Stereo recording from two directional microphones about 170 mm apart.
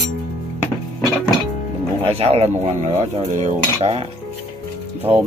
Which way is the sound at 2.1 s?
35° right (ahead or behind).